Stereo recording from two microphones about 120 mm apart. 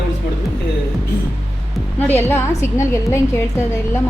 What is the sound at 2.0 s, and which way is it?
A woman's voice, 20° left (ahead or behind).